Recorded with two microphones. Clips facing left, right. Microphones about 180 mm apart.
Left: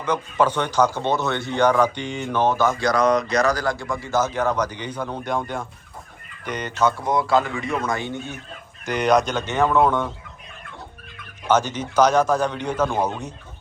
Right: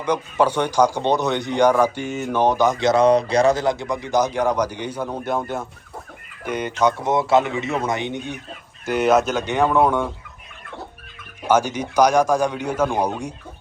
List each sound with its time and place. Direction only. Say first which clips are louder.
0.0 s speech: right 1 dB; 10° right (ahead or behind)
6.4 s speech: right 2 dB; 10° right (ahead or behind)
7.0 s speech: right 2 dB; 25° right (ahead or behind)
8.9 s speech: right 2 dB; 5° right (ahead or behind)
11.4 s speech: right 2 dB; 10° right (ahead or behind)